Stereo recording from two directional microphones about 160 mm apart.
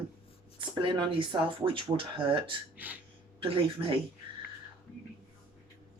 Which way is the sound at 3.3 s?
35° right (ahead or behind).